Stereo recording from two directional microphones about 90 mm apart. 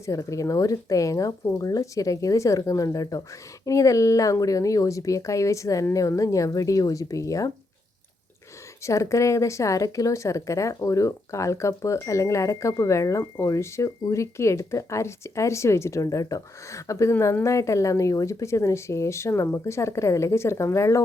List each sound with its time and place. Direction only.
0.0 s speech: 35° left (ahead or behind)
8.8 s speech: 35° left (ahead or behind)